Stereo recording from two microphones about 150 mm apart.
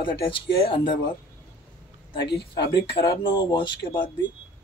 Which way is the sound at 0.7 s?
40° left (ahead or behind).